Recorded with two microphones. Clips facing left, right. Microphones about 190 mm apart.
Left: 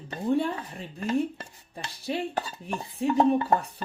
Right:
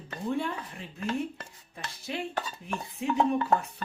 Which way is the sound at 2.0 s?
35° left (ahead or behind).